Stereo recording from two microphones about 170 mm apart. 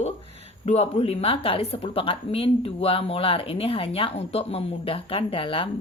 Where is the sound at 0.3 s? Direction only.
40° right (ahead or behind).